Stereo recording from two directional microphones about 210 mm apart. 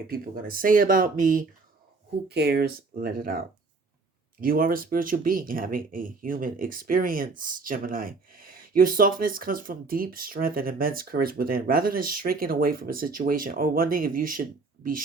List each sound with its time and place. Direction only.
0.1 s speech: 45° right (ahead or behind)
2.3 s speech: 50° right (ahead or behind)